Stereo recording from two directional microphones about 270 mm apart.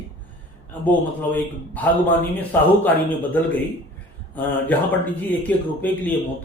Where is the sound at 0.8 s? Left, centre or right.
Centre.